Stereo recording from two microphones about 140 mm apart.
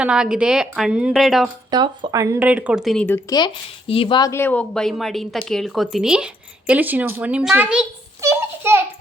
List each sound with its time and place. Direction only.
0.0 s a woman's voice: 5° right (ahead or behind)
1.7 s speech: 30° right (ahead or behind)
2.4 s speech: 10° right (ahead or behind)
3.2 s speech: 30° left (ahead or behind)
4.3 s a woman's voice: 15° left (ahead or behind); by 7.9 s 10° right (ahead or behind)
8.2 s a sound: 20° right (ahead or behind)